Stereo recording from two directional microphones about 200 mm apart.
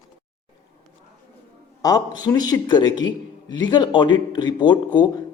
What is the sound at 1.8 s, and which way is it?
A man's voice, 20° left (ahead or behind).